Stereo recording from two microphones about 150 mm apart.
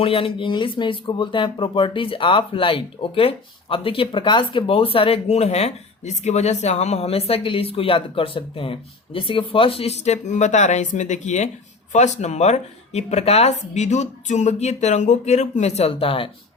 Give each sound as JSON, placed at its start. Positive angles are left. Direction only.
{"t": 0.0, "sound": "speech", "side_deg": 40}